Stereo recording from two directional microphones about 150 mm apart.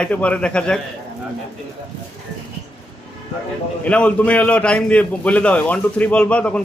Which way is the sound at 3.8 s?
10° left (ahead or behind).